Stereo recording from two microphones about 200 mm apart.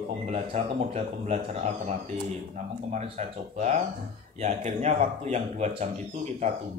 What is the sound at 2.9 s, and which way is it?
Speech, 35° right (ahead or behind).